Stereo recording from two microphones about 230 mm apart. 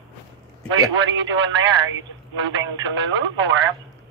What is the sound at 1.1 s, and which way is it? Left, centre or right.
Speech, right.